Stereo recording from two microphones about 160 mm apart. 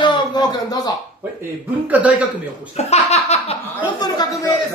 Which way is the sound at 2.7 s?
40° left (ahead or behind).